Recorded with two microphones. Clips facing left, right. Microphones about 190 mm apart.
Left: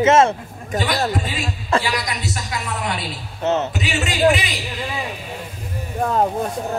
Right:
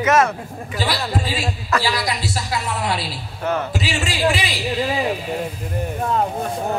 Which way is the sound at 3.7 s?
30° right (ahead or behind).